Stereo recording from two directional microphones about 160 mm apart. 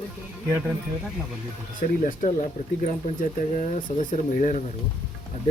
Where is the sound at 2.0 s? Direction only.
50° left (ahead or behind).